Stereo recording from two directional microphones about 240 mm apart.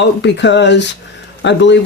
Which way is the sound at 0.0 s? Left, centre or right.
Left.